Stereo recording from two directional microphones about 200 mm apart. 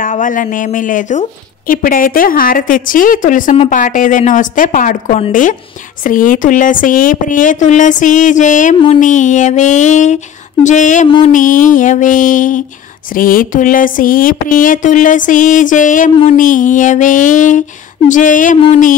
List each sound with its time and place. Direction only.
0.0 s a woman's voice: 40° left (ahead or behind)
11.1 s a sound: 25° left (ahead or behind)
11.3 s a woman's voice: 40° left (ahead or behind)